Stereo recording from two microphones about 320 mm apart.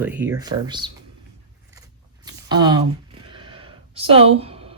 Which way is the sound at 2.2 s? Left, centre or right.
Centre.